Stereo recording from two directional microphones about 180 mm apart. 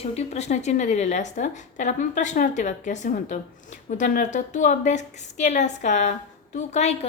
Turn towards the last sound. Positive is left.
turn(degrees=40)  # may be behind; listen again after turning